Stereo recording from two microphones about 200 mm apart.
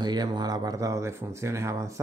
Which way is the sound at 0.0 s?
20° right (ahead or behind).